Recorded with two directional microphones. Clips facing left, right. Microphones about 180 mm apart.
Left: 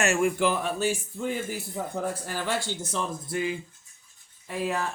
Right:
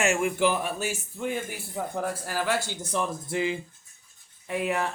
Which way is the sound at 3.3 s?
25° right (ahead or behind).